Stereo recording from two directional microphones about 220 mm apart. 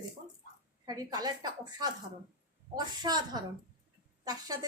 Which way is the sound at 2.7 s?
20° right (ahead or behind).